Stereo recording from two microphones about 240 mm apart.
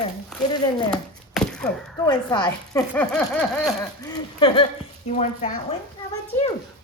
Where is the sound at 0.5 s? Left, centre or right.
Centre.